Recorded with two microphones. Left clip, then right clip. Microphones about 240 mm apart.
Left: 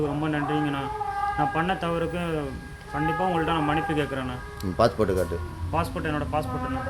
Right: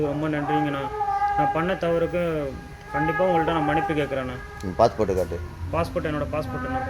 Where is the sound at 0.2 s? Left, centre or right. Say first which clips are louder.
Right 2 dB; centre.